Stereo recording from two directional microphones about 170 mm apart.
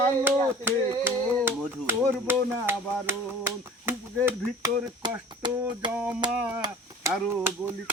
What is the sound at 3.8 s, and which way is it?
Speech, 15° right (ahead or behind).